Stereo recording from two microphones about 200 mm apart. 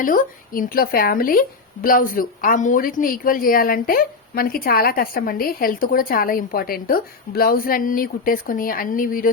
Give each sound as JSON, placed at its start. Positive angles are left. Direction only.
{"t": 0.0, "sound": "a woman's voice", "side_deg": 45}